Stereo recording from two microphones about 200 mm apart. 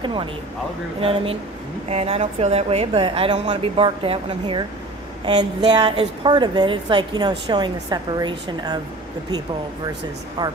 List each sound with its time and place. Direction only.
0.0 s a woman's voice: 25° right (ahead or behind)
10.4 s a woman's voice: 20° right (ahead or behind)